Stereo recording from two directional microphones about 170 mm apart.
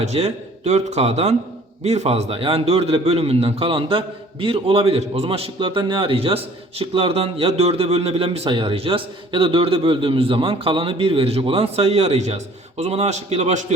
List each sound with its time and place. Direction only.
0.0 s a man's voice: 40° right (ahead or behind)